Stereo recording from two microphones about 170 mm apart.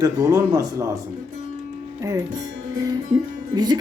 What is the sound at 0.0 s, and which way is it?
Speech, 20° right (ahead or behind).